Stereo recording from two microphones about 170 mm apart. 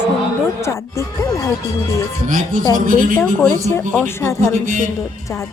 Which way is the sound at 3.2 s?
5° left (ahead or behind).